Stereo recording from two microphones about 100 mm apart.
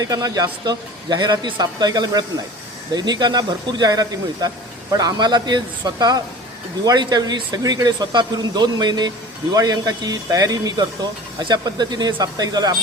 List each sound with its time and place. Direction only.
0.0 s speech: 40° right (ahead or behind)